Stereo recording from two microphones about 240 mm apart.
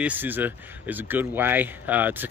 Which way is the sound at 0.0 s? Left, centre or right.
Centre.